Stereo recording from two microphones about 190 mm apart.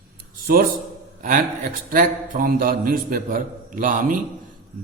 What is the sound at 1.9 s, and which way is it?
A man's voice, 45° right (ahead or behind).